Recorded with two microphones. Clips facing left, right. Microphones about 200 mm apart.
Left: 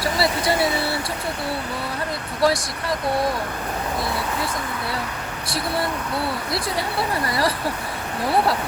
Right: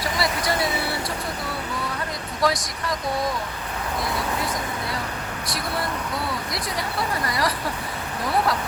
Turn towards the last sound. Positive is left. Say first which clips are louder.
# left 3 dB
turn(degrees=30)  # may be behind; listen again after turning